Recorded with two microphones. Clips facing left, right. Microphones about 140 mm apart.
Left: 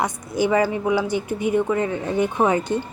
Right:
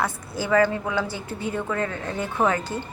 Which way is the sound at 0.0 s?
20° left (ahead or behind).